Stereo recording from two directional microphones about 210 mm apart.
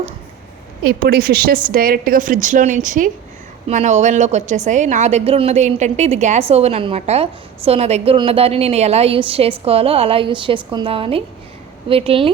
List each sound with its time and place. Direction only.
0.9 s a woman's voice: 45° right (ahead or behind); by 12.3 s 25° right (ahead or behind)